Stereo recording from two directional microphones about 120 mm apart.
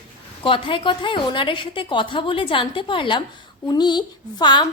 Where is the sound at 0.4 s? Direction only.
45° left (ahead or behind).